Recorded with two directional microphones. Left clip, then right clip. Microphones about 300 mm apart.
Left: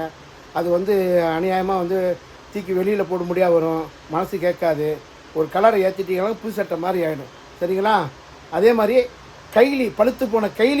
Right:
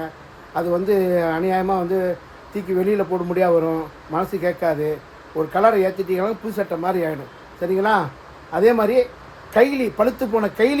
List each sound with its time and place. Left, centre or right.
0.5 s speech: centre